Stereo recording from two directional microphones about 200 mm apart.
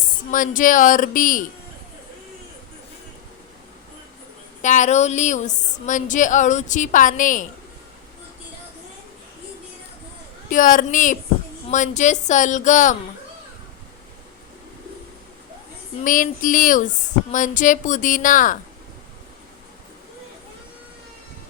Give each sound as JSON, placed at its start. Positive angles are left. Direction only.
{"t": 0.3, "sound": "a woman's voice", "side_deg": 40}
{"t": 4.6, "sound": "a woman's voice", "side_deg": 35}
{"t": 10.5, "sound": "a woman's voice", "side_deg": 40}
{"t": 16.0, "sound": "a woman's voice", "side_deg": 40}